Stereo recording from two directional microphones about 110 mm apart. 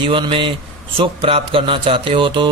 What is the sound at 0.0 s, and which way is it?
A man's voice, 50° right (ahead or behind).